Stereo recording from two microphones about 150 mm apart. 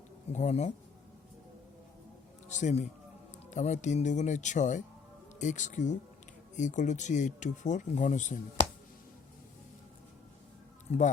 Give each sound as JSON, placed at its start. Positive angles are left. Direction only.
{"t": 0.3, "sound": "speech", "side_deg": 50}
{"t": 2.5, "sound": "speech", "side_deg": 55}
{"t": 10.9, "sound": "speech", "side_deg": 50}